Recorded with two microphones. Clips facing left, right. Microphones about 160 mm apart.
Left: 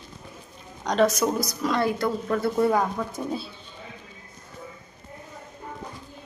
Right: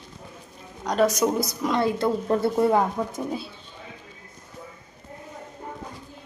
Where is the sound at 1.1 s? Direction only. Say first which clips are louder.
Right 2 dB; 20° right (ahead or behind).